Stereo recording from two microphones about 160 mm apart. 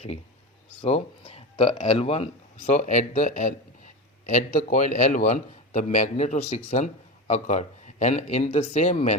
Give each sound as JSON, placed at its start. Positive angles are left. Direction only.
{"t": 0.8, "sound": "a man's voice", "side_deg": 35}